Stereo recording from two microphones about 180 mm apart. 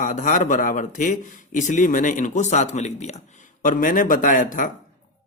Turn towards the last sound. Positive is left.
turn(degrees=45)  # may be behind; listen again after turning